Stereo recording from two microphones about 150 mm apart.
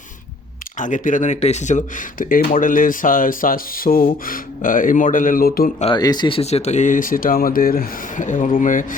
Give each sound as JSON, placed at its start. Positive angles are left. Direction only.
{"t": 0.8, "sound": "speech", "side_deg": 60}
{"t": 5.8, "sound": "speech", "side_deg": 30}